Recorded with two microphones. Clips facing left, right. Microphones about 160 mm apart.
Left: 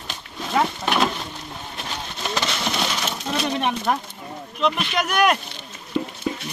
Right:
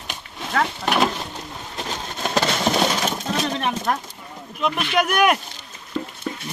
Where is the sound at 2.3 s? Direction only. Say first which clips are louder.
Right 6 dB; 40° right (ahead or behind).